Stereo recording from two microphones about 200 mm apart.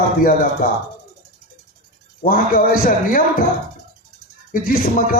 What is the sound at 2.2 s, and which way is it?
A man's voice, 45° left (ahead or behind).